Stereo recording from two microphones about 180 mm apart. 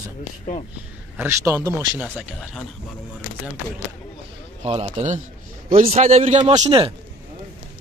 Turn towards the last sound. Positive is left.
turn(degrees=-30)  # may be behind; listen again after turning